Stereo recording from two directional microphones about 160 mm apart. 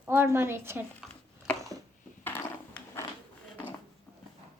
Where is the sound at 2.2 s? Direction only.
10° left (ahead or behind).